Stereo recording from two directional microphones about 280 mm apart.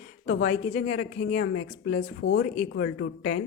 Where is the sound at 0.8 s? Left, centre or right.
Left.